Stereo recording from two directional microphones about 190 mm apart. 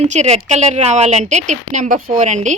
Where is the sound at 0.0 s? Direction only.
35° right (ahead or behind).